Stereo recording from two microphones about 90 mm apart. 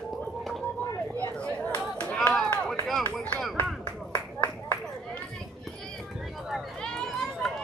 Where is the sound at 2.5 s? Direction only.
20° left (ahead or behind).